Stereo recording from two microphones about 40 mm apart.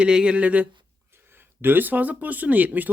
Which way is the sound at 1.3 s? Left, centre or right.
Right.